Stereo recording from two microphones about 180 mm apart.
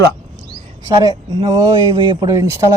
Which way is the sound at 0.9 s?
25° right (ahead or behind).